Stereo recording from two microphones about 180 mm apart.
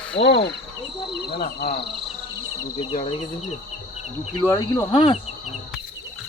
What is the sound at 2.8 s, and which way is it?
Speech, 30° left (ahead or behind).